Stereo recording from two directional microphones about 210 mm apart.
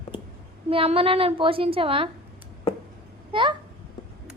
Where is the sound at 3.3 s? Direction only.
25° right (ahead or behind).